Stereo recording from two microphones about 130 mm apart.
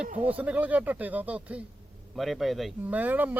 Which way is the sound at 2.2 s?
Centre (ahead or behind).